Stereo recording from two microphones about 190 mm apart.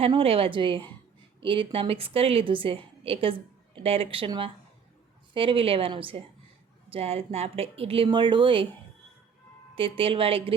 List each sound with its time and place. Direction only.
0.0 s a woman's voice: 30° right (ahead or behind)
9.7 s a woman's voice: 30° right (ahead or behind)